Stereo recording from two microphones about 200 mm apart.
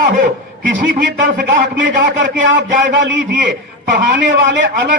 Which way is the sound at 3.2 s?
55° right (ahead or behind).